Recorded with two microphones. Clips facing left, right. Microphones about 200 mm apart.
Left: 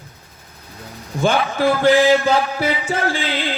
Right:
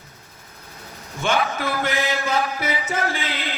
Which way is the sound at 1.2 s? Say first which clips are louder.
Left 5 dB; 30° left (ahead or behind).